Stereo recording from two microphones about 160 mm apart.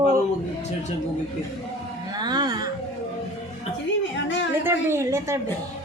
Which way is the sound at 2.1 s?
25° right (ahead or behind).